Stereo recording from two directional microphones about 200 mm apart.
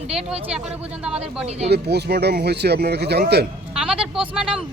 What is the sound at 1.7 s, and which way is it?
Speech, 55° right (ahead or behind).